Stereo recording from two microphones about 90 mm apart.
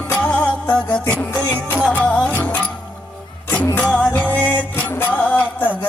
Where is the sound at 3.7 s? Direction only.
15° left (ahead or behind).